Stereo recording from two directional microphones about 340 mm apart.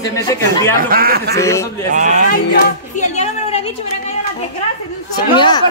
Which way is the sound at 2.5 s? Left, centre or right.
Left.